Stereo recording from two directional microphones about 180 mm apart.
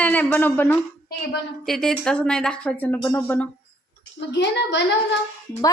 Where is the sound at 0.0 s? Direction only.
10° left (ahead or behind).